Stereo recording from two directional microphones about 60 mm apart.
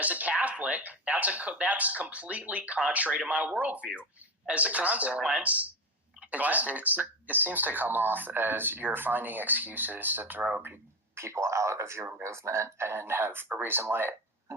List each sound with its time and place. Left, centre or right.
0.0 s speech: right
10.6 s speech: right